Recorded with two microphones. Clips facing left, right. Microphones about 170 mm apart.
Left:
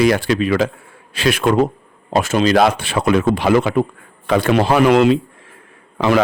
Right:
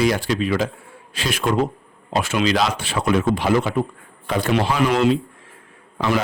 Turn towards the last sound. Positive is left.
turn(degrees=70)  # may be behind; listen again after turning